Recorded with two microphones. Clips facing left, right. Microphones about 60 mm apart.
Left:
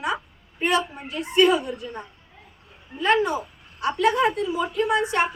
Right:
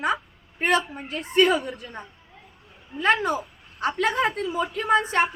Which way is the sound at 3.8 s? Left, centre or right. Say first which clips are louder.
Left 3 dB; right.